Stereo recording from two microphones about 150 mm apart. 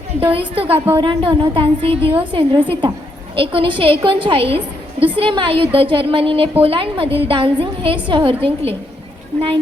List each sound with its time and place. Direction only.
0.3 s a woman's voice: 40° right (ahead or behind)